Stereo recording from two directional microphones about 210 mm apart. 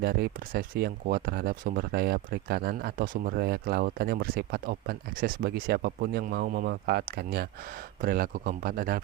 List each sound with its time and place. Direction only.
0.0 s speech: 45° right (ahead or behind)